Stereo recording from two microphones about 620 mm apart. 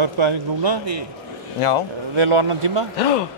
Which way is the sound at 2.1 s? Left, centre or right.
Right.